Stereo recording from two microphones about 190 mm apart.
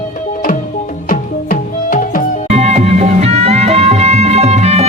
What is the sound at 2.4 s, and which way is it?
Music, 35° right (ahead or behind).